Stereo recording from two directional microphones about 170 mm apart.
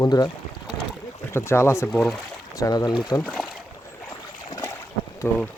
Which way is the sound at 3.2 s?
Centre (ahead or behind).